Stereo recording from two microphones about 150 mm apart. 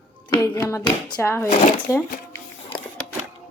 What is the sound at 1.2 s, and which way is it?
Speech, 15° left (ahead or behind).